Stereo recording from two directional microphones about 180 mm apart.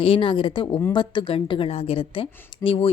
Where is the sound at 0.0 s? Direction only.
30° left (ahead or behind).